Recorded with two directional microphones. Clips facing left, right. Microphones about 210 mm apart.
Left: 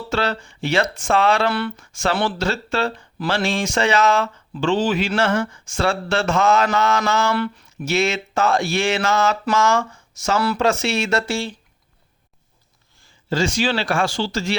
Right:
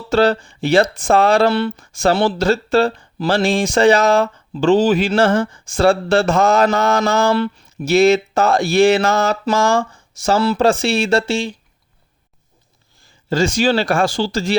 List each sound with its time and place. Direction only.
0.1 s speech: 35° right (ahead or behind)
11.3 s speech: 15° right (ahead or behind)
13.3 s speech: 45° right (ahead or behind)